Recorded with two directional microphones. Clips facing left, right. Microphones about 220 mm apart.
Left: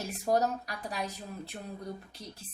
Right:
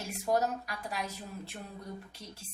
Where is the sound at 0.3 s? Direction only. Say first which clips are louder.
Left 2 dB; 40° left (ahead or behind).